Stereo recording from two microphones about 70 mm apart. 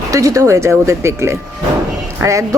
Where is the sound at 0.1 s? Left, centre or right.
Right.